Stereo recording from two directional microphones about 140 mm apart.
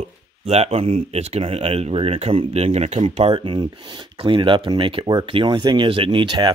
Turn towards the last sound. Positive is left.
turn(degrees=-35)  # may be behind; listen again after turning